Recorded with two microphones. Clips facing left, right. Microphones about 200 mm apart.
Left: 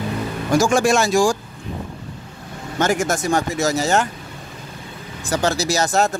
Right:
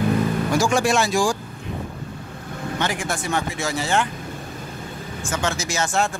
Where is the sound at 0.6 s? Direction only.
45° left (ahead or behind).